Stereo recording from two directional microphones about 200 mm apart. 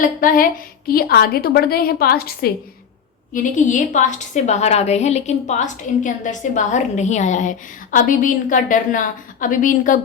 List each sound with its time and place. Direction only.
0.0 s a woman's voice: 45° left (ahead or behind)